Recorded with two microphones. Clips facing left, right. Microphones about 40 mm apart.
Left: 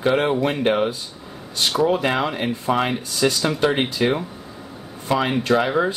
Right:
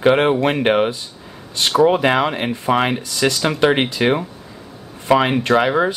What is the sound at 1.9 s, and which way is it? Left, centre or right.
Speech, right.